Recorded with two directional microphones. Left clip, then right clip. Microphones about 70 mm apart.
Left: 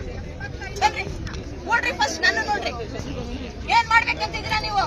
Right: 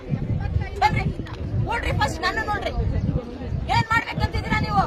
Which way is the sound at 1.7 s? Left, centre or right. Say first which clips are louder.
Left 4 dB; centre.